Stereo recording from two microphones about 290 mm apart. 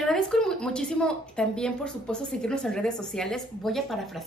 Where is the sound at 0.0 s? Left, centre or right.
Centre.